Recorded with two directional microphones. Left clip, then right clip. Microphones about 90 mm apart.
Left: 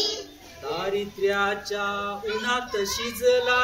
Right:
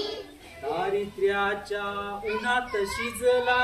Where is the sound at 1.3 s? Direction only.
15° right (ahead or behind).